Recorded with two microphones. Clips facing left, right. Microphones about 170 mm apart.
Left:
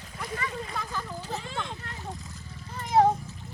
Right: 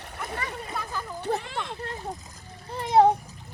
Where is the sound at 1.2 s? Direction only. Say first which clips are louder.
Right 7 dB; 65° right (ahead or behind).